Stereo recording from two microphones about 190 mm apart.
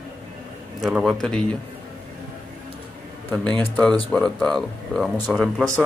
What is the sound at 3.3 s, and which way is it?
A man's voice, 10° left (ahead or behind).